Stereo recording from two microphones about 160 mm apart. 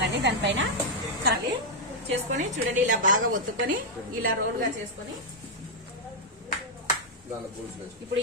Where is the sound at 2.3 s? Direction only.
50° right (ahead or behind).